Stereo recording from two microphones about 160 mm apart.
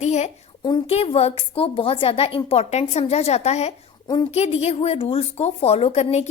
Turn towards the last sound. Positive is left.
turn(degrees=40)  # may be behind; listen again after turning